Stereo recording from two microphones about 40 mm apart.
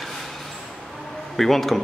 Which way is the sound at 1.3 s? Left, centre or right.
Centre.